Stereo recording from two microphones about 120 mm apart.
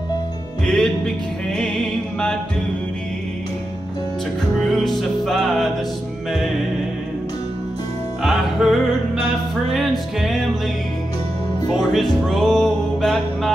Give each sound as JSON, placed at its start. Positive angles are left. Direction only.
{"t": 0.7, "sound": "music", "side_deg": 5}
{"t": 4.6, "sound": "music", "side_deg": 0}
{"t": 8.2, "sound": "music", "side_deg": 0}
{"t": 11.9, "sound": "music", "side_deg": 0}